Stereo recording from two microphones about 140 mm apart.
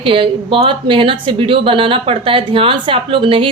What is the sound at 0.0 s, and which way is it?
Speech, 40° right (ahead or behind).